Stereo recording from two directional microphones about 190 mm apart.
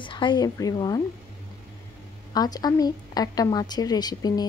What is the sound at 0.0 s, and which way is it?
A woman's voice, 25° left (ahead or behind).